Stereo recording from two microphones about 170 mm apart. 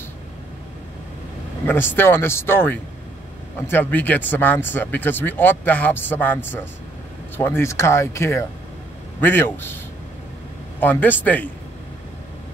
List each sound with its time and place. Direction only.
1.7 s speech: 10° left (ahead or behind)
10.8 s speech: 10° left (ahead or behind)